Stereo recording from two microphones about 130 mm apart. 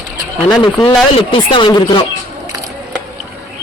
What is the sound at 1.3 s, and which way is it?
Speech, 40° left (ahead or behind).